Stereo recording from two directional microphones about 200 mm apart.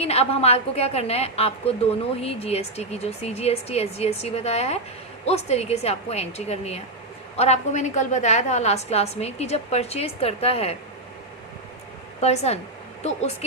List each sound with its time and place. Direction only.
0.0 s a woman's voice: 30° left (ahead or behind)
12.2 s a woman's voice: 35° left (ahead or behind)